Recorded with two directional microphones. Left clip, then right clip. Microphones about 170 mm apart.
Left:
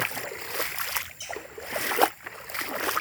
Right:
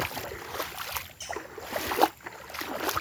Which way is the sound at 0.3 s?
15° left (ahead or behind).